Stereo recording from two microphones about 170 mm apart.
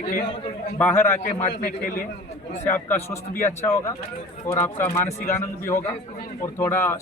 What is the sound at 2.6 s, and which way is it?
Speech, 15° left (ahead or behind).